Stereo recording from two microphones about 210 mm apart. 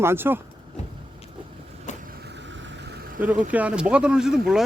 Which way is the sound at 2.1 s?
50° right (ahead or behind).